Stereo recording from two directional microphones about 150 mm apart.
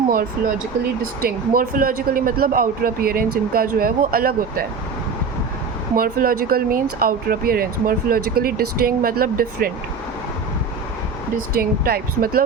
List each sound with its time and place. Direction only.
1.2 s speech: 75° right (ahead or behind)
6.0 s speech: 75° right (ahead or behind)
11.3 s speech: 85° right